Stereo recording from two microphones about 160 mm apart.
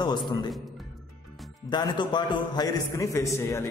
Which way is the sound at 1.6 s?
30° left (ahead or behind).